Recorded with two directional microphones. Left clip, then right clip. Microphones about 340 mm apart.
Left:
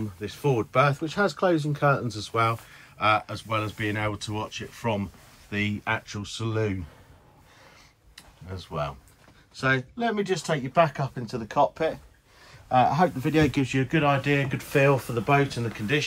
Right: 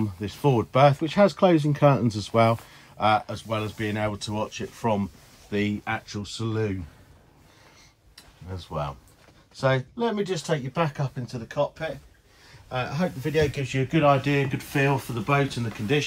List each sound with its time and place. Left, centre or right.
0.2 s speech: centre
3.0 s speech: centre
8.5 s speech: centre
12.9 s speech: centre